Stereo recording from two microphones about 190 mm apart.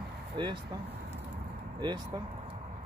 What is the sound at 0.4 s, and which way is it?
Speech, 25° right (ahead or behind).